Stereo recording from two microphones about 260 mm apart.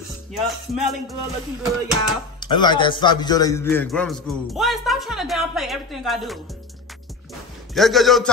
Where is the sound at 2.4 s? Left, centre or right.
Centre.